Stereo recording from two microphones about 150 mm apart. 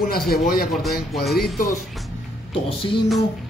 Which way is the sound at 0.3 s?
85° left.